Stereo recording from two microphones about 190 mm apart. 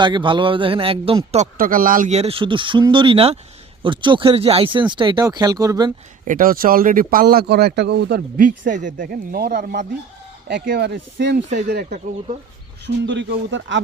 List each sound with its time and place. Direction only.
0.0 s speech: 25° right (ahead or behind)
1.5 s speech: 45° right (ahead or behind); by 5.9 s 20° right (ahead or behind)
6.2 s speech: 45° right (ahead or behind); by 11.4 s 65° right (ahead or behind)
11.4 s speech: 40° right (ahead or behind)
11.7 s speech: 55° right (ahead or behind)
12.8 s speech: 70° right (ahead or behind)